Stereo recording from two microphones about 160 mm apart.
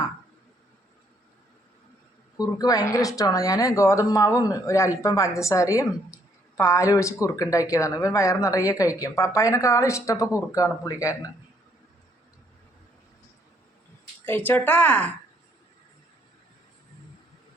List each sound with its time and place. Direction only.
2.4 s speech: 25° left (ahead or behind)
14.3 s speech: 10° left (ahead or behind)